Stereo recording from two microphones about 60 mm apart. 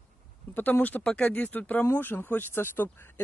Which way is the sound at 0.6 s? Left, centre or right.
Left.